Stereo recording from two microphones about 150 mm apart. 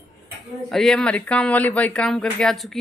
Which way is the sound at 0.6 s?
5° left (ahead or behind).